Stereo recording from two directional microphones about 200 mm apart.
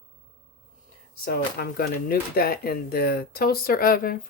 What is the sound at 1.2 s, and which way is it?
Speech, 50° left (ahead or behind).